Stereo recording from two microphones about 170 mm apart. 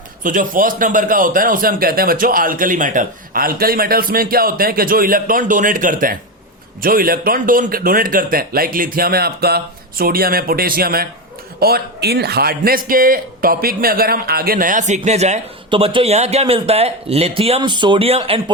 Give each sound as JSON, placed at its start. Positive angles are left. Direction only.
{"t": 0.2, "sound": "a man's voice", "side_deg": -50}